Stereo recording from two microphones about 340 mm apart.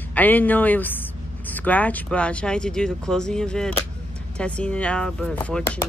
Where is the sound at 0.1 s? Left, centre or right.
Centre.